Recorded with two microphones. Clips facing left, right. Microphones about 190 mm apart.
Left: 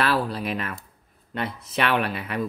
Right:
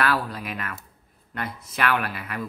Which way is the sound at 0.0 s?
30° left (ahead or behind).